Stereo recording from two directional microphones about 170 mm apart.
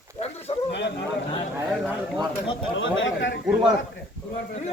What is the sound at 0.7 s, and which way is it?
Speech, 90° left.